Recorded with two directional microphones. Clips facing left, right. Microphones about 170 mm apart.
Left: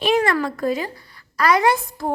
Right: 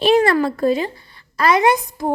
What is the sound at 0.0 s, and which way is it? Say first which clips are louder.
A woman's voice: right 4 dB; 30° right (ahead or behind).